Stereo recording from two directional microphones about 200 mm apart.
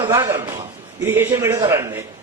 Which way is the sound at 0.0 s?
15° right (ahead or behind).